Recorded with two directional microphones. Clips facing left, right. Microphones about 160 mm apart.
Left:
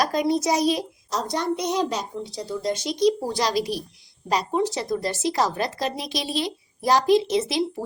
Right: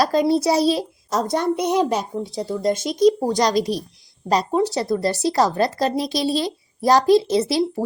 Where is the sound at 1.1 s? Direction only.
50° right (ahead or behind).